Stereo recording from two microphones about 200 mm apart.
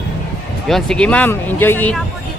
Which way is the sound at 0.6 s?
Centre (ahead or behind).